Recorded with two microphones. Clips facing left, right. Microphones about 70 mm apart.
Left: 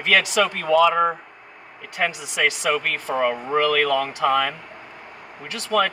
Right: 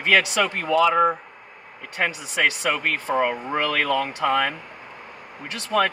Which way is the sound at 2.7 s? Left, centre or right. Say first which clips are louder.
Even; centre.